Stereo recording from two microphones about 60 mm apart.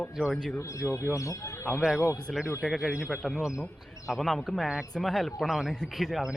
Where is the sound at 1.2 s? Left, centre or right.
Left.